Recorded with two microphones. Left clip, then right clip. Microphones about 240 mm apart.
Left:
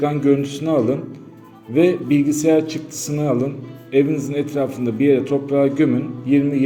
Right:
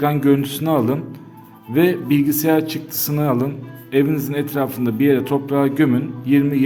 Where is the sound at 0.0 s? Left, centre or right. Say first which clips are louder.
Even; right.